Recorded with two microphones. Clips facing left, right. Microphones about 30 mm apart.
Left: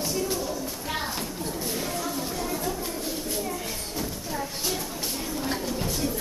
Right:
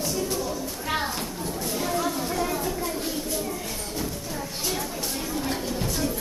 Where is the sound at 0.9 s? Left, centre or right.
Centre.